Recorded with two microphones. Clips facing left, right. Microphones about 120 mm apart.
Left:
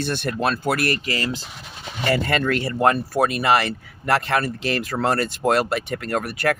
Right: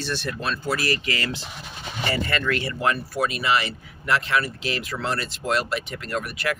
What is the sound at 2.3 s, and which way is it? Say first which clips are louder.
Speech: left 4 dB; 45° left (ahead or behind).